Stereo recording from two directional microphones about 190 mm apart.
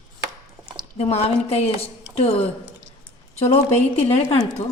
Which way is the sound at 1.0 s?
35° left (ahead or behind).